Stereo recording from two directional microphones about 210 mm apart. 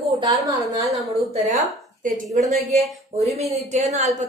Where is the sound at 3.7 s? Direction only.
35° right (ahead or behind).